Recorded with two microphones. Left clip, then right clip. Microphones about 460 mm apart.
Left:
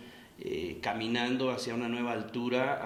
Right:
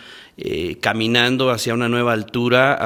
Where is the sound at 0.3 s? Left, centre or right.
Right.